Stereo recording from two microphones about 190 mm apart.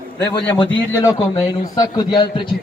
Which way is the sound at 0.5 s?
20° left (ahead or behind).